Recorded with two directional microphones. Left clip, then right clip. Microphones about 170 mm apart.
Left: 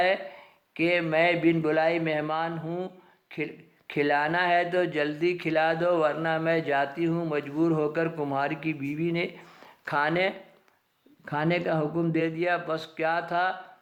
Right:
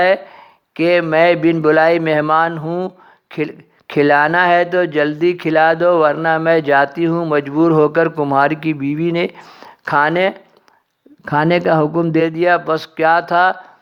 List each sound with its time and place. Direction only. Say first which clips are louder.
0.0 s speech: right 11 dB; 45° right (ahead or behind)